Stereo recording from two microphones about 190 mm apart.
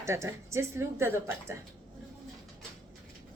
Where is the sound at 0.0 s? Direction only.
15° right (ahead or behind).